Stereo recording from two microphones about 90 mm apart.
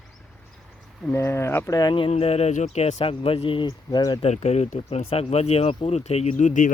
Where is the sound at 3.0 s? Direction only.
90° left.